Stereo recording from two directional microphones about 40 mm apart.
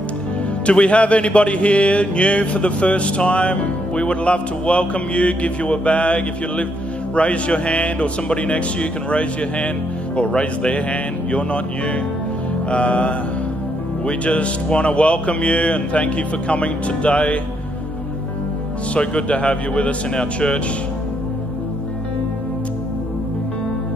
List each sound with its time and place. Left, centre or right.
0.7 s speech: left
18.9 s speech: left